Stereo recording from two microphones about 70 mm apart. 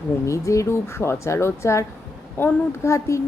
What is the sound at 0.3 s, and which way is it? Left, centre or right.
Speech, left.